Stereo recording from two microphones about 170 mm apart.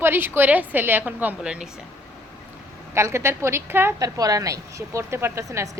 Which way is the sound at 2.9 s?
15° right (ahead or behind).